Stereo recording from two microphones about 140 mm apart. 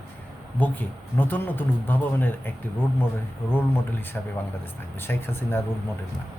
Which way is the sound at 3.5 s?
15° left (ahead or behind).